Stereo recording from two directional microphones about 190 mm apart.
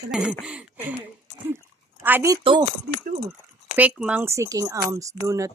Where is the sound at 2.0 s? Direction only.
15° right (ahead or behind).